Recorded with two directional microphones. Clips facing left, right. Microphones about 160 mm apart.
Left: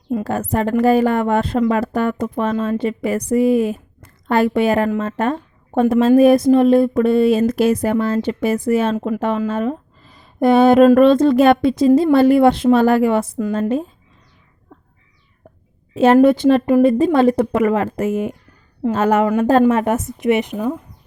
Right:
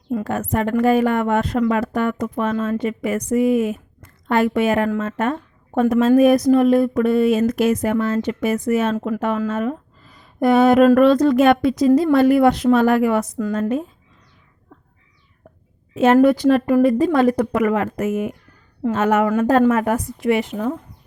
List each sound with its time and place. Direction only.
0.3 s a woman's voice: 35° left (ahead or behind)
14.7 s a sound: 30° left (ahead or behind)
16.1 s a woman's voice: 25° left (ahead or behind)